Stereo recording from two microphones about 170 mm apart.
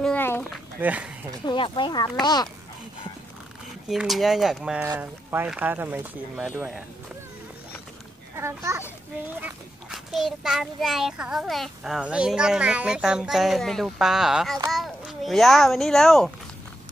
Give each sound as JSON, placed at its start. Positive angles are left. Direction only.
{"t": 0.0, "sound": "a sound", "side_deg": 10}
{"t": 0.7, "sound": "speech", "side_deg": -10}
{"t": 1.4, "sound": "speech", "side_deg": 30}
{"t": 3.9, "sound": "a child's voice", "side_deg": 0}
{"t": 8.4, "sound": "speech", "side_deg": -15}
{"t": 9.4, "sound": "a child's voice", "side_deg": -5}